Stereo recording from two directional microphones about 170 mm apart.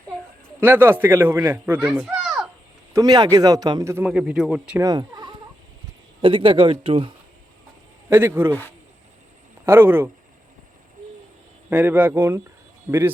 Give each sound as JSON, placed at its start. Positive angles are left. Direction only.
{"t": 0.6, "sound": "speech", "side_deg": -10}
{"t": 2.9, "sound": "speech", "side_deg": -25}
{"t": 4.8, "sound": "a sound", "side_deg": -25}
{"t": 6.2, "sound": "speech", "side_deg": -30}
{"t": 8.1, "sound": "speech", "side_deg": -15}
{"t": 9.6, "sound": "speech", "side_deg": -10}
{"t": 11.7, "sound": "speech", "side_deg": -10}